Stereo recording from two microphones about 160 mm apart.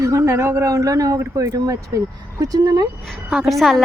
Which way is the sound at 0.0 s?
20° right (ahead or behind).